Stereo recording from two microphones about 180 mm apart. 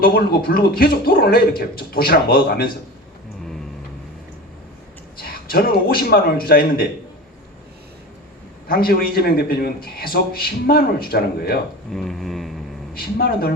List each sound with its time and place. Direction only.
0.0 s a man's voice: 55° left (ahead or behind)
5.2 s a man's voice: 55° left (ahead or behind)
8.6 s a man's voice: 55° left (ahead or behind)
11.9 s a sound: centre (ahead or behind)
12.9 s a man's voice: 55° left (ahead or behind)